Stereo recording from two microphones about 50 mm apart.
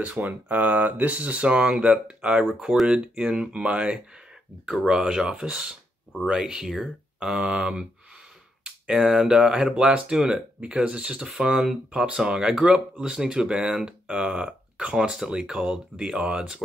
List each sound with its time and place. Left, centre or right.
0.2 s speech: right; by 16.6 s centre